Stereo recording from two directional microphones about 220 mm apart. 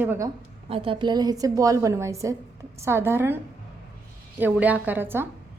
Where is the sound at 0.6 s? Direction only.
25° right (ahead or behind).